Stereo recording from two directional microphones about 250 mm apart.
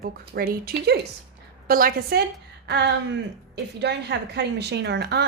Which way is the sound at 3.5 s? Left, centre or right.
Right.